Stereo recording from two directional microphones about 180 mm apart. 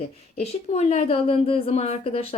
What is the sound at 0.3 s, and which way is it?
Speech, 35° left (ahead or behind).